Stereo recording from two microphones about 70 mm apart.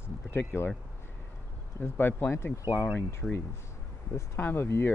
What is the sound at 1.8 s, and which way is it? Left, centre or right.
Speech, left.